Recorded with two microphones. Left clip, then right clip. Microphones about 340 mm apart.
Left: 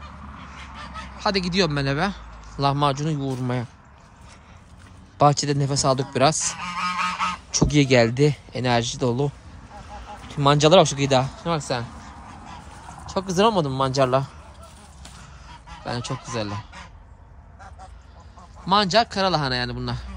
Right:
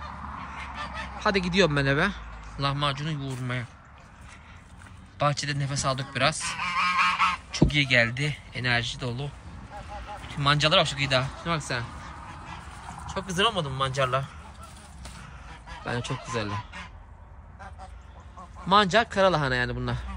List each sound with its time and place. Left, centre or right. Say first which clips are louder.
0.6 s goose: even; centre
5.1 s speech: left 8 dB; centre
6.5 s goose: right 1 dB; left
7.5 s speech: left 7 dB; centre
13.1 s speech: left 6 dB; centre
15.8 s speech: left 2 dB; centre
18.7 s speech: left 2 dB; centre